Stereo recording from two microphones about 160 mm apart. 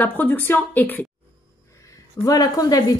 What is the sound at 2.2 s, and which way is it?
Speech, 20° left (ahead or behind).